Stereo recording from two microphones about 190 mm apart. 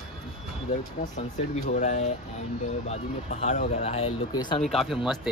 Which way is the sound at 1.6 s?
40° left (ahead or behind).